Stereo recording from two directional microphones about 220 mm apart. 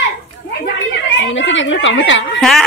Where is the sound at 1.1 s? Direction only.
55° left (ahead or behind).